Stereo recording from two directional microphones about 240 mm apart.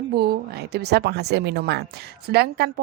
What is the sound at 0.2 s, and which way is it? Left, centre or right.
Speech, right.